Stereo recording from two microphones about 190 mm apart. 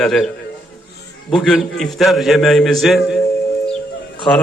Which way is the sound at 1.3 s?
Centre (ahead or behind).